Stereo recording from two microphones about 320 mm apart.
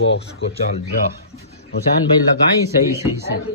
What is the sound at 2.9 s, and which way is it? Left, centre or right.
Speech, centre.